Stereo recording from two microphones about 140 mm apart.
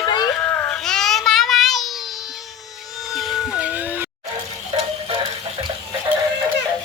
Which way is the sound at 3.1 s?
Centre (ahead or behind).